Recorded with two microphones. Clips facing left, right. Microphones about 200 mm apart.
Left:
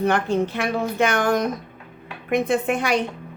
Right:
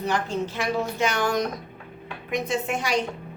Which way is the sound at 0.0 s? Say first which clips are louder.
Left 6 dB; 60° left (ahead or behind).